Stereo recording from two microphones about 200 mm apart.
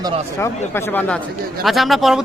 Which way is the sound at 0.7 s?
10° left (ahead or behind).